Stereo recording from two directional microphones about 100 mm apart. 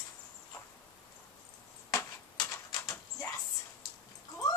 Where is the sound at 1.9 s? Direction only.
35° left (ahead or behind).